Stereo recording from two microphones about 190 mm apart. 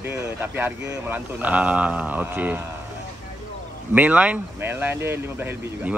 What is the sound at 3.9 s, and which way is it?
A man's voice, 10° right (ahead or behind).